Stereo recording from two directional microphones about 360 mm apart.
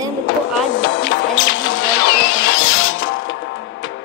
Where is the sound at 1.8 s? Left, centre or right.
Left.